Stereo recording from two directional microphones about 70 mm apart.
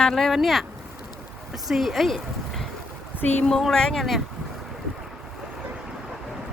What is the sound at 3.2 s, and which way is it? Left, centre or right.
Speech, left.